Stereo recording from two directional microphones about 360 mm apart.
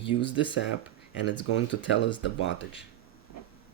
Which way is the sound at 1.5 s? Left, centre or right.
Left.